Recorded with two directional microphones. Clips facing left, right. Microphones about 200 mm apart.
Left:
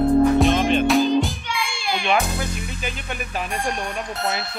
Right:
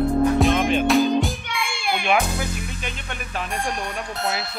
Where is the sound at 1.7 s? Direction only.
55° right (ahead or behind).